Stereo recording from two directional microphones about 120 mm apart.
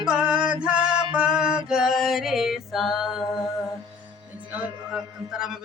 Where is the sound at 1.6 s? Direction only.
5° right (ahead or behind).